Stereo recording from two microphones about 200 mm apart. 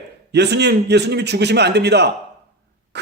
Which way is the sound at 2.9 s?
60° right (ahead or behind).